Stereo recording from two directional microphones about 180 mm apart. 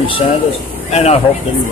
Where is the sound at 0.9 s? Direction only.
35° left (ahead or behind).